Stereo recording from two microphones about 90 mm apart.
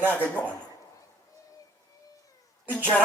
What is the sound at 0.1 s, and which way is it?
Speech, 15° left (ahead or behind).